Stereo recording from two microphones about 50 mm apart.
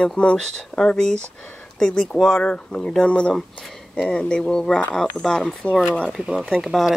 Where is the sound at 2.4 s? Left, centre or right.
Left.